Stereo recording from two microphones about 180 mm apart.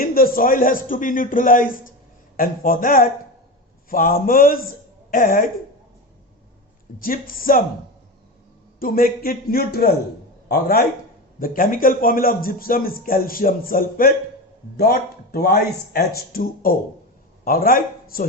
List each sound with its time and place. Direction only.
0.0 s a man's voice: 55° left (ahead or behind)
7.0 s a man's voice: 50° left (ahead or behind)
8.8 s a man's voice: 55° left (ahead or behind)